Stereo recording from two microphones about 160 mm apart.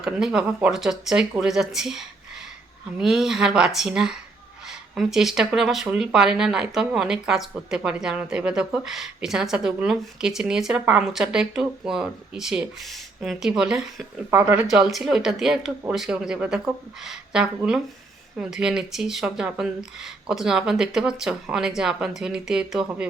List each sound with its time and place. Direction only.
0.0 s speech: 5° right (ahead or behind)
14.7 s speech: centre (ahead or behind)